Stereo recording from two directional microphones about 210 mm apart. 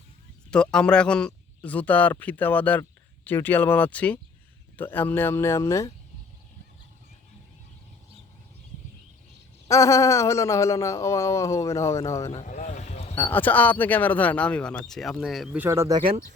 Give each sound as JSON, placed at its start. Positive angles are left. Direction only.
{"t": 0.5, "sound": "speech", "side_deg": 5}
{"t": 9.6, "sound": "speech", "side_deg": 15}
{"t": 12.3, "sound": "vehicle", "side_deg": 30}
{"t": 13.1, "sound": "speech", "side_deg": 10}